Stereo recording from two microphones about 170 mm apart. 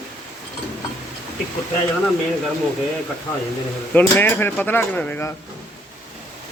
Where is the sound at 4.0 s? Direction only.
10° left (ahead or behind).